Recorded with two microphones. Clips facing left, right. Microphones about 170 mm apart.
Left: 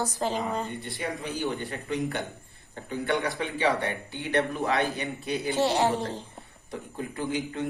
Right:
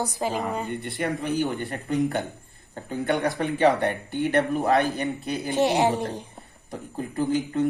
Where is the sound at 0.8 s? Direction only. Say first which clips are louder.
Right 5 dB; 65° right (ahead or behind).